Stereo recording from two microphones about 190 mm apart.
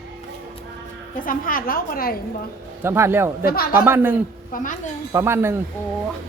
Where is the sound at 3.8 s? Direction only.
10° right (ahead or behind).